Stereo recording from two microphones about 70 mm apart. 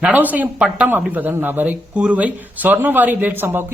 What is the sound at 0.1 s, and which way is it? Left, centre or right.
Speech, right.